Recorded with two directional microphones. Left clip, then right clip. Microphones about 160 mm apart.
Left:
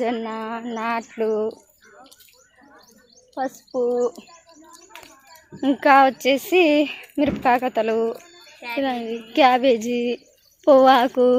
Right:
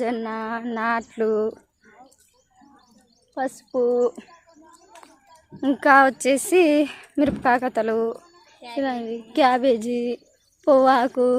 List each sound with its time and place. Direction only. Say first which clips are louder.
0.0 s speech: left 1 dB; 5° right (ahead or behind); by 1.5 s 25° right (ahead or behind)
3.3 s speech: even; 25° right (ahead or behind)
5.5 s a woman's voice: left 1 dB; 5° right (ahead or behind)